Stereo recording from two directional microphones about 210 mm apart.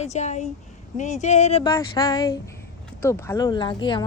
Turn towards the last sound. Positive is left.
turn(degrees=25)  # may be behind; listen again after turning